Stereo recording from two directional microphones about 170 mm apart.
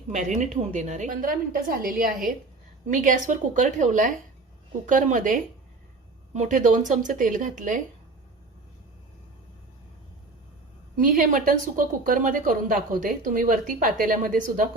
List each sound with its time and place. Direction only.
0.1 s a woman's voice: 45° right (ahead or behind)
10.9 s a woman's voice: 55° right (ahead or behind)